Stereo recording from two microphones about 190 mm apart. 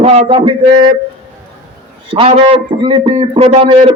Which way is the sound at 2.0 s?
30° right (ahead or behind).